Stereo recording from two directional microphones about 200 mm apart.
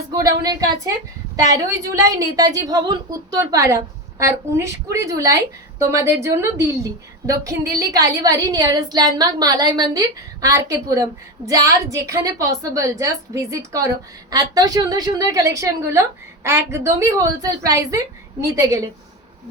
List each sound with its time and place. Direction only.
0.1 s a woman's voice: 15° right (ahead or behind)